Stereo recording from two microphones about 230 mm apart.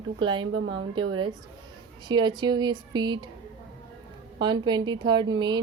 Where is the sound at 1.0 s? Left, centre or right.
Right.